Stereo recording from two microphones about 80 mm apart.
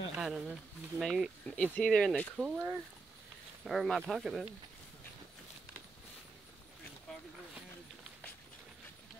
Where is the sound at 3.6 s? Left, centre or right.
Centre.